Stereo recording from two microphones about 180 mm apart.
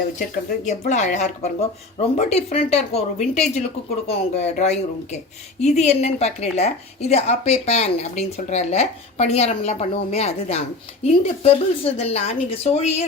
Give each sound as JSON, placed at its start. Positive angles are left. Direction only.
{"t": 0.2, "sound": "a woman's voice", "side_deg": 40}